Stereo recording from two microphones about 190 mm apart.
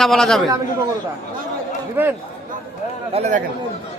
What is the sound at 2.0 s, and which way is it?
Speech, 10° right (ahead or behind).